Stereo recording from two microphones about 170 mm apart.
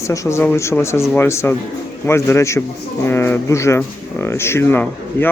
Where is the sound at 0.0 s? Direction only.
15° left (ahead or behind).